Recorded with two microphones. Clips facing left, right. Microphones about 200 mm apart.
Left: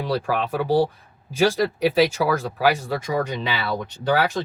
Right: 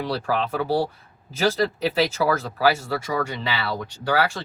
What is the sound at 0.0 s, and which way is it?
Speech, 15° left (ahead or behind).